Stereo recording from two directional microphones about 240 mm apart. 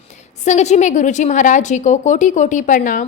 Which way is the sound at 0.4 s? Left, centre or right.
Left.